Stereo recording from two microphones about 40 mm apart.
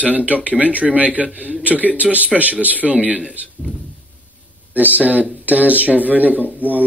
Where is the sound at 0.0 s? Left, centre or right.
Right.